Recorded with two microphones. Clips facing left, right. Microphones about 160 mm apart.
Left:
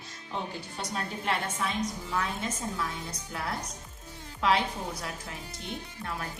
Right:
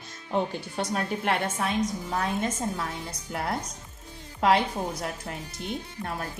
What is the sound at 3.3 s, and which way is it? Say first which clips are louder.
A woman's voice: right 5 dB; 50° right (ahead or behind).